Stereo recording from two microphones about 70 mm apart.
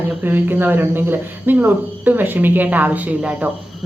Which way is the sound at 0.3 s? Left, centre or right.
Right.